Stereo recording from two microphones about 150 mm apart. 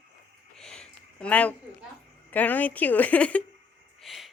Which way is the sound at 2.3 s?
10° left (ahead or behind).